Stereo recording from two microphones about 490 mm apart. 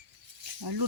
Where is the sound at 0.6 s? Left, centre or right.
Right.